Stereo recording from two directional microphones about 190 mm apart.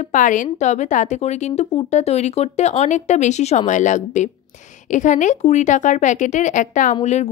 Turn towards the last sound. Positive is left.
turn(degrees=35)  # may be behind; listen again after turning